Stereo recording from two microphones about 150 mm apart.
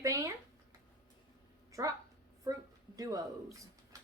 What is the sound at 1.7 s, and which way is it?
Speech, 20° right (ahead or behind).